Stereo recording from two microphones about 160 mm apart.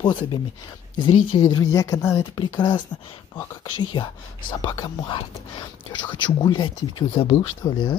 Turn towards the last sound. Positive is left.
turn(degrees=30)  # may be behind; listen again after turning